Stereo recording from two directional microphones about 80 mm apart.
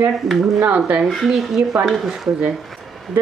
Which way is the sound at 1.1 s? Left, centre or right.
Centre.